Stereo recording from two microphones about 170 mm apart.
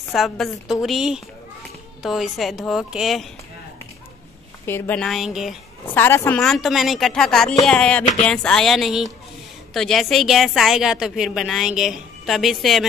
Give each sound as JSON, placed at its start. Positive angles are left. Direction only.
{"t": 0.1, "sound": "a woman's voice", "side_deg": 0}
{"t": 4.6, "sound": "a woman's voice", "side_deg": 10}
{"t": 5.9, "sound": "a woman's voice", "side_deg": 15}